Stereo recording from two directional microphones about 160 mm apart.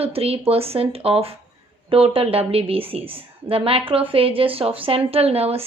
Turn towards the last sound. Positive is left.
turn(degrees=-40)  # may be behind; listen again after turning